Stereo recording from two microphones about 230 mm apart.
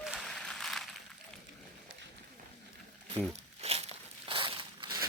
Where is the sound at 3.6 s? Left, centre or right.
Right.